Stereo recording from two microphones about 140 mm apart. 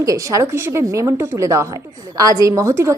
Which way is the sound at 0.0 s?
25° right (ahead or behind).